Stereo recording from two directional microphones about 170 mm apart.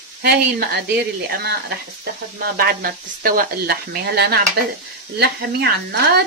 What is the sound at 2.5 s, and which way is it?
Speech, 60° right (ahead or behind).